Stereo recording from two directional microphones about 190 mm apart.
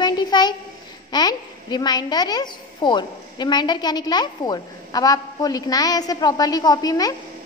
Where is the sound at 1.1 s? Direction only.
20° left (ahead or behind).